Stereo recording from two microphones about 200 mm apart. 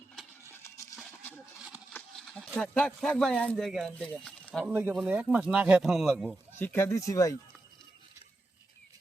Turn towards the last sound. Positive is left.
turn(degrees=15)  # may be behind; listen again after turning